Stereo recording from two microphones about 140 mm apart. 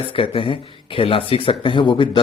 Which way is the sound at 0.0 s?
40° left (ahead or behind).